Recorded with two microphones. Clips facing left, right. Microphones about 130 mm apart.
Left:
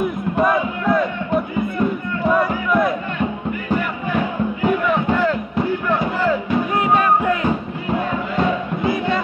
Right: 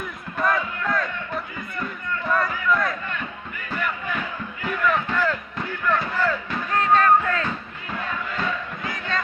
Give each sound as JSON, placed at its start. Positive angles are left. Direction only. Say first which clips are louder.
{"t": 0.4, "sound": "music", "louder": "left 5 dB", "side_deg": 20}
{"t": 3.7, "sound": "crowd", "louder": "left 6 dB", "side_deg": 25}
{"t": 4.6, "sound": "a sound", "louder": "left 5 dB", "side_deg": 20}